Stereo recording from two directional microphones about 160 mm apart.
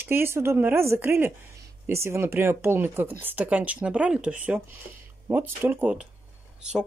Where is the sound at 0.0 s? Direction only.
15° right (ahead or behind).